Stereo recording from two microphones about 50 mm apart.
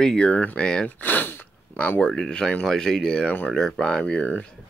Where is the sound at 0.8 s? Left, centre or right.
Left.